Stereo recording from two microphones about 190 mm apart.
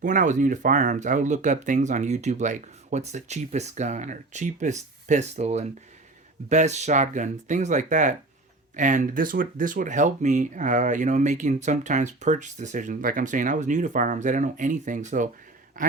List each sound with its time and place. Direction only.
0.0 s a man's voice: 45° right (ahead or behind)